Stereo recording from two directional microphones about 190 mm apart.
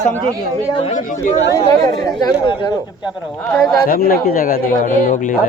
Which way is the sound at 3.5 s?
5° left (ahead or behind).